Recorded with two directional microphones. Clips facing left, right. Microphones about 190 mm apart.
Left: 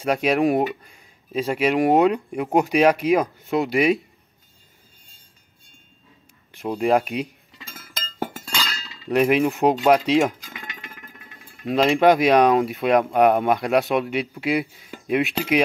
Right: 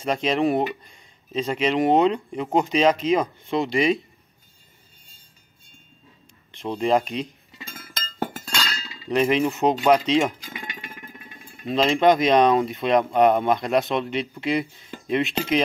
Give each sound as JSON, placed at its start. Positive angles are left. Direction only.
{"t": 0.0, "sound": "speech", "side_deg": 10}
{"t": 6.6, "sound": "speech", "side_deg": 5}
{"t": 8.4, "sound": "chink", "side_deg": 0}
{"t": 9.1, "sound": "speech", "side_deg": 10}
{"t": 10.4, "sound": "music", "side_deg": -20}
{"t": 11.6, "sound": "speech", "side_deg": 10}